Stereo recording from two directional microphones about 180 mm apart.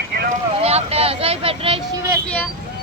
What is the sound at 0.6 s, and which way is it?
Vehicle, 35° right (ahead or behind).